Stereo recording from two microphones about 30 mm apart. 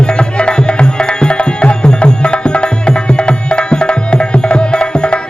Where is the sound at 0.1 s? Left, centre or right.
Left.